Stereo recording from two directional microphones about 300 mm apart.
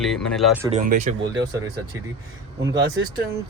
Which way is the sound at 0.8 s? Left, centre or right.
Right.